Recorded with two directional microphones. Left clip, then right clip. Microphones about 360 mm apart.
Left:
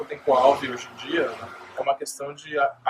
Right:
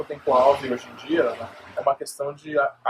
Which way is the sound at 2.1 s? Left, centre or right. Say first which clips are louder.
Right 3 dB; centre.